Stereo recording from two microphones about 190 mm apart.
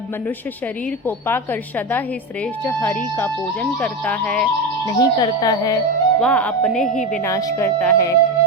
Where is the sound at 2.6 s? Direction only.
10° left (ahead or behind).